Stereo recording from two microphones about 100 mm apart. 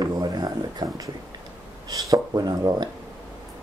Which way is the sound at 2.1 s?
40° right (ahead or behind).